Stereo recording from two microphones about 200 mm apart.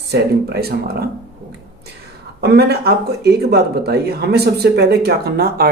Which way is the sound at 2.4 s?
55° right (ahead or behind).